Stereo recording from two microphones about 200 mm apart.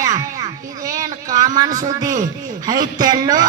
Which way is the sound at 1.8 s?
20° right (ahead or behind).